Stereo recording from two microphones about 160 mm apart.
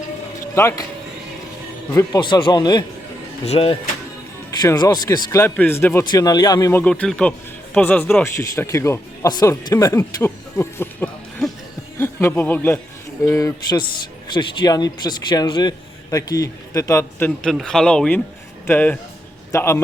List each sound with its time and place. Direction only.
0.3 s music: 20° left (ahead or behind)
1.9 s a man's voice: 20° left (ahead or behind)
3.4 s speech: 40° left (ahead or behind)
4.6 s a man's voice: 25° left (ahead or behind)